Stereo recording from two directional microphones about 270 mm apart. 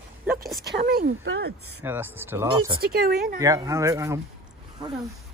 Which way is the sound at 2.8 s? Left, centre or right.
Right.